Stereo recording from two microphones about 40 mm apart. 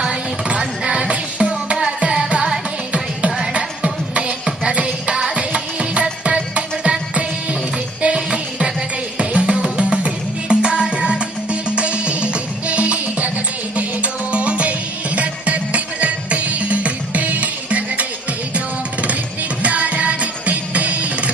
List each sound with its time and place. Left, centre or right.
0.0 s music: right
1.4 s music: centre; by 18.0 s right
19.0 s music: right